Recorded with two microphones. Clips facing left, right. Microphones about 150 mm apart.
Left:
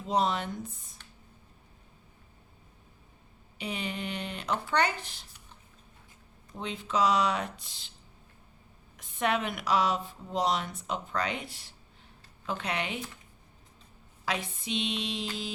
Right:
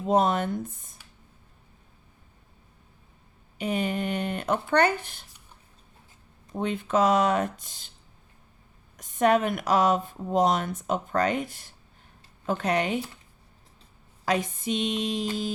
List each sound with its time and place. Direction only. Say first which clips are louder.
0.1 s speech: right 6 dB; 50° right (ahead or behind)
3.6 s speech: right 8 dB; 50° right (ahead or behind)
6.5 s speech: right 7 dB; 55° right (ahead or behind)
9.0 s speech: right 8 dB; 45° right (ahead or behind)
14.3 s speech: right 7 dB; 45° right (ahead or behind)